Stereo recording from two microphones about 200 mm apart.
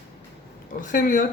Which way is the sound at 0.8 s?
40° left (ahead or behind).